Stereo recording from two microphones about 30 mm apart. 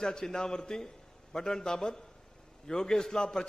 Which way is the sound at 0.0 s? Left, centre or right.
Left.